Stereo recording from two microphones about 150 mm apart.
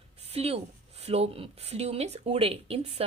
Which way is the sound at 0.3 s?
40° right (ahead or behind).